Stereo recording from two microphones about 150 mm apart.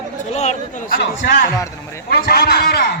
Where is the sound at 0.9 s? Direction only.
70° left (ahead or behind).